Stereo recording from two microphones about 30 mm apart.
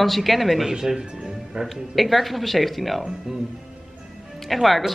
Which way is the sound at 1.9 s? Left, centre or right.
Centre.